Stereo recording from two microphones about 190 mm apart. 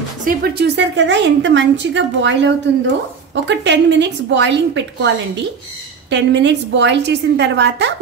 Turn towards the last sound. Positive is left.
turn(degrees=-65)  # may be behind; listen again after turning